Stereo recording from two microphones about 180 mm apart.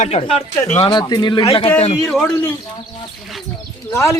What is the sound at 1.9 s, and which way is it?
Speech, centre (ahead or behind).